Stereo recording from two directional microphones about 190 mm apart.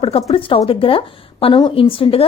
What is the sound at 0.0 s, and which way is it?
A woman's voice, 30° left (ahead or behind).